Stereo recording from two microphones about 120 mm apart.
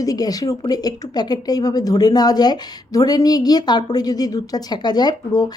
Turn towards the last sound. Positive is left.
turn(degrees=35)  # may be behind; listen again after turning